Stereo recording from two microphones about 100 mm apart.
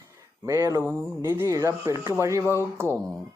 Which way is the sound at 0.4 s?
30° right (ahead or behind).